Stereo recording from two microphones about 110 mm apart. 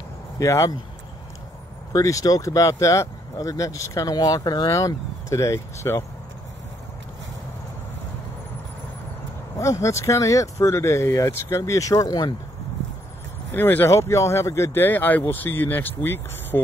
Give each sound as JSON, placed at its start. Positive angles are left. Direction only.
{"t": 0.4, "sound": "speech", "side_deg": 30}
{"t": 1.9, "sound": "speech", "side_deg": 30}
{"t": 9.6, "sound": "speech", "side_deg": 25}
{"t": 13.5, "sound": "speech", "side_deg": 20}